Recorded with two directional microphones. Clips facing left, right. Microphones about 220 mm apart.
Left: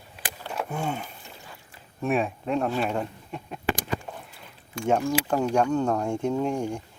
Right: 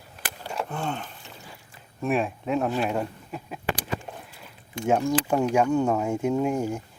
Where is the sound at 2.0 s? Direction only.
Centre (ahead or behind).